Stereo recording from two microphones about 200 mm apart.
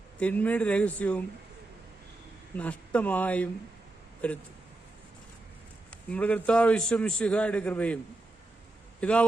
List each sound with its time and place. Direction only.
0.2 s a man's voice: 5° left (ahead or behind)
2.6 s a man's voice: 5° left (ahead or behind)
5.9 s a man's voice: 5° left (ahead or behind)
9.0 s a man's voice: 5° left (ahead or behind)